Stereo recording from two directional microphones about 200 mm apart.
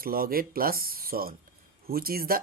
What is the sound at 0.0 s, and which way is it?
Speech, 45° right (ahead or behind).